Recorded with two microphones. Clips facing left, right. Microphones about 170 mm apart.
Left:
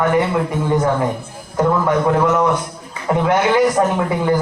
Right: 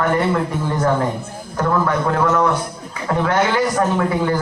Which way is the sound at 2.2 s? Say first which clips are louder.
Left 1 dB; 20° left (ahead or behind).